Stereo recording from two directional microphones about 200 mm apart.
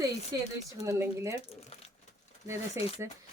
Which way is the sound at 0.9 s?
15° right (ahead or behind).